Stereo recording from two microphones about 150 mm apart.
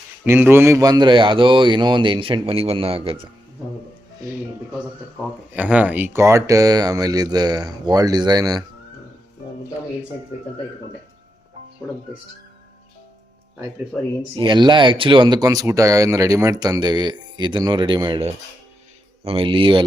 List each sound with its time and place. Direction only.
0.3 s a man's voice: 15° right (ahead or behind); by 3.2 s 40° right (ahead or behind)
5.5 s speech: 10° right (ahead or behind); by 8.6 s 25° right (ahead or behind)
14.3 s a man's voice: 30° right (ahead or behind)